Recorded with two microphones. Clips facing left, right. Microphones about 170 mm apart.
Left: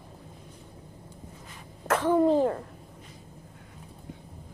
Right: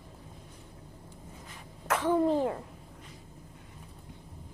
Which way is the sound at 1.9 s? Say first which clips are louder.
Left 3 dB; 10° right (ahead or behind).